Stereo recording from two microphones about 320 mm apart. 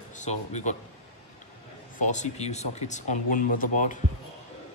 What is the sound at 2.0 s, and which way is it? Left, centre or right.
Speech, left.